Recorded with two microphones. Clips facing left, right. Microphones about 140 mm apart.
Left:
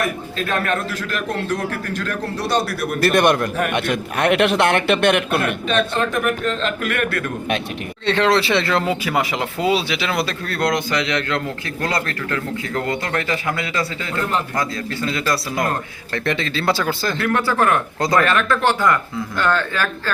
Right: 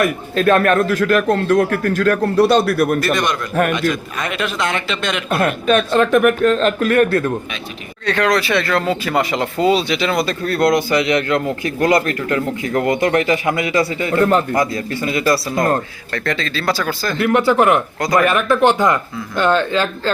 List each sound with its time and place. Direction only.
0.3 s a man's voice: 55° right (ahead or behind)
3.0 s a man's voice: 60° left (ahead or behind)
5.4 s a man's voice: 50° right (ahead or behind); by 7.3 s 30° right (ahead or behind)
8.0 s speech: 25° left (ahead or behind)
9.1 s a man's voice: 5° left (ahead or behind); by 15.4 s 10° right (ahead or behind)
16.1 s speech: 20° left (ahead or behind)
17.2 s a man's voice: 20° right (ahead or behind)